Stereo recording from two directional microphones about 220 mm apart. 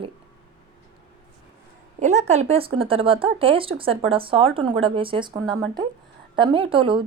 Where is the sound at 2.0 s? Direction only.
30° right (ahead or behind).